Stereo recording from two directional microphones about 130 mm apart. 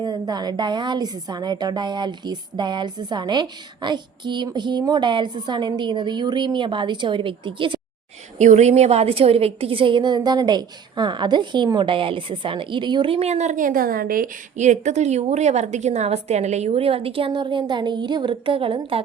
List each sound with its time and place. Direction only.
0.0 s a woman's voice: 30° right (ahead or behind)
8.4 s a woman's voice: 65° right (ahead or behind); by 19.0 s 45° right (ahead or behind)